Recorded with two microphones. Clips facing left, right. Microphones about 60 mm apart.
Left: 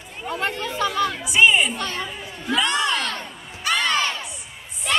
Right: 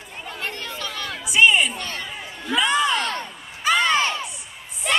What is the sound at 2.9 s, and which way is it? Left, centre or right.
Speech, right.